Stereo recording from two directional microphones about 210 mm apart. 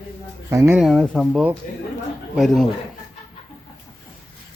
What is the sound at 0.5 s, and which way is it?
Speech, 10° right (ahead or behind).